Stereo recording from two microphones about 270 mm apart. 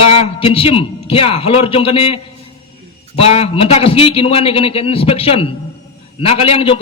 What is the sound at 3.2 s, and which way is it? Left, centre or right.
A man's voice, left.